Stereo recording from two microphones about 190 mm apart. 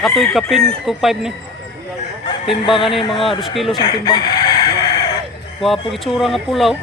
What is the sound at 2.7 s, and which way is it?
Chicken, 30° left (ahead or behind).